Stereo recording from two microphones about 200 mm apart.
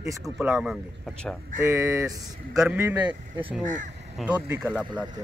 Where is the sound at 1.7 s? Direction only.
15° right (ahead or behind).